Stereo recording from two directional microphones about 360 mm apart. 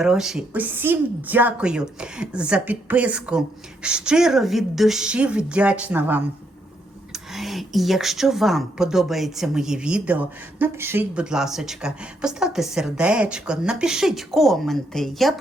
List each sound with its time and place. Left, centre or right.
0.0 s speech: centre